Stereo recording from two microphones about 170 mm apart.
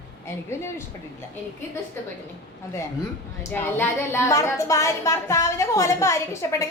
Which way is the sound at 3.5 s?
10° left (ahead or behind).